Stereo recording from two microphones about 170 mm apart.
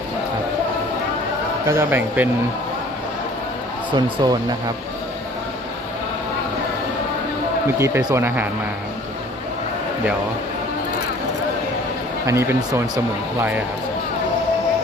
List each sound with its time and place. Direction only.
1.7 s speech: 15° right (ahead or behind)
3.9 s speech: 25° right (ahead or behind)
7.8 s speech: 15° right (ahead or behind)
12.3 s speech: 15° right (ahead or behind)